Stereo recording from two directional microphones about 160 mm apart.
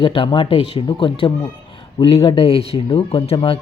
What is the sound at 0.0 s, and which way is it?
Speech, 30° left (ahead or behind).